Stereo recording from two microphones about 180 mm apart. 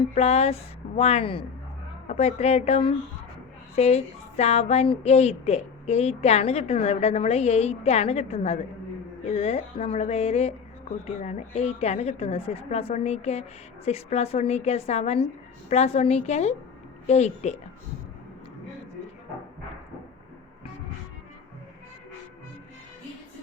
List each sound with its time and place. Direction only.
0.0 s a woman's voice: 35° left (ahead or behind)